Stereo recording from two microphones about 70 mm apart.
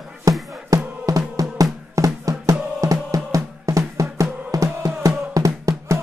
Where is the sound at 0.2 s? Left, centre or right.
Right.